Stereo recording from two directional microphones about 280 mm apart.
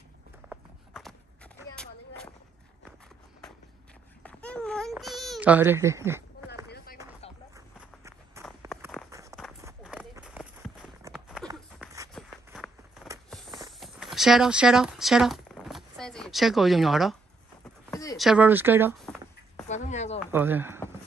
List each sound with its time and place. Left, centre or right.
0.5 s walk: centre
4.2 s baby cry: centre
8.4 s walk: centre
9.1 s run: centre
11.8 s a sound: centre
12.1 s a sound: centre
18.1 s speech: centre
19.7 s speech: left
20.2 s speech: centre